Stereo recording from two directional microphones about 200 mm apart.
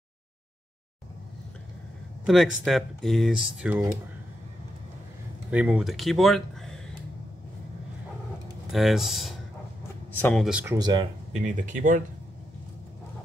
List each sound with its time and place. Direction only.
2.2 s speech: centre (ahead or behind)
5.5 s speech: 5° right (ahead or behind)
8.6 s speech: centre (ahead or behind)
10.1 s speech: 10° left (ahead or behind)
10.4 s speech: 5° right (ahead or behind)
10.8 s speech: 20° right (ahead or behind)
11.3 s speech: 40° right (ahead or behind)